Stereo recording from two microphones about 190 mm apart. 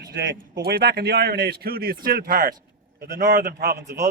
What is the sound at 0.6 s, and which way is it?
Speech, 55° right (ahead or behind).